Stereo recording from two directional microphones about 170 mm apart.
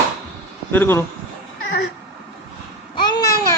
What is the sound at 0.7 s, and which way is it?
Speech, 10° left (ahead or behind).